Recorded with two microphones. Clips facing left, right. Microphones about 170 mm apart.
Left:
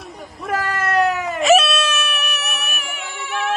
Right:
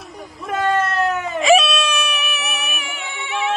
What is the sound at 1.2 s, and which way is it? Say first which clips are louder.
Baby cry: right 3 dB; centre (ahead or behind).